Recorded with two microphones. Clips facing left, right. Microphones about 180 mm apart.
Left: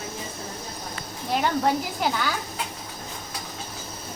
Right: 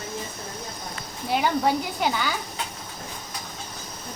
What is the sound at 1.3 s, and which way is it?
Speech, centre (ahead or behind).